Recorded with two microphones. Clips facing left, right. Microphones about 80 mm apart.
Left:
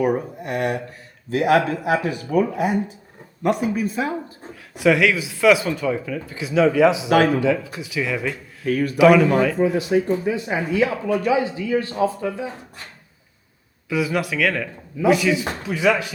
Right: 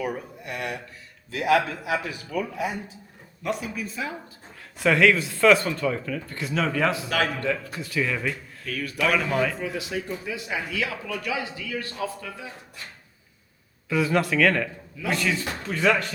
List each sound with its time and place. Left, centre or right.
0.0 s speech: left
4.8 s speech: centre
8.6 s speech: left
9.0 s speech: centre
9.6 s speech: left
13.9 s speech: centre